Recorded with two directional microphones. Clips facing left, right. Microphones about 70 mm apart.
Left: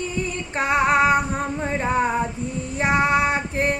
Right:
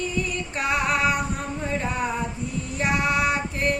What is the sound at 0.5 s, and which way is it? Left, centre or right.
Female singing, left.